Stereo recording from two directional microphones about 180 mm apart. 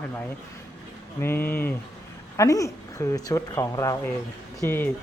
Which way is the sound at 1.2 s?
10° left (ahead or behind).